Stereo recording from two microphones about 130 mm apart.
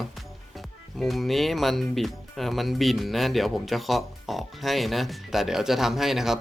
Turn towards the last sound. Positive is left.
turn(degrees=-5)  # may be behind; listen again after turning